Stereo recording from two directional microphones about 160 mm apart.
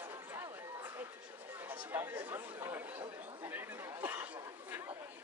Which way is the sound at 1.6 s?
10° right (ahead or behind).